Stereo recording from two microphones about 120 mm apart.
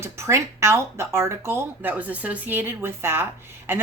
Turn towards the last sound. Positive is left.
turn(degrees=-20)  # may be behind; listen again after turning